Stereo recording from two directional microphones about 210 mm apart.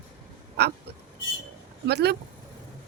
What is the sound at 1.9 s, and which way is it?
Speech, 50° right (ahead or behind).